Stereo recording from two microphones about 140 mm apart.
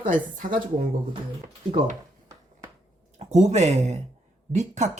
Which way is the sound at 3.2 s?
50° right (ahead or behind).